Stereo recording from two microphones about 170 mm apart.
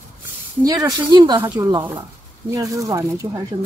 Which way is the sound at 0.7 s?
20° right (ahead or behind).